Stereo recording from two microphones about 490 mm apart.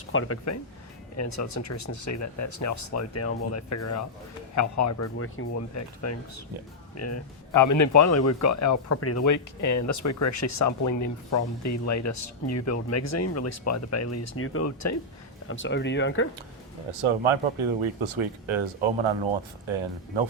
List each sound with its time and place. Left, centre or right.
0.1 s speech: left
16.9 s speech: right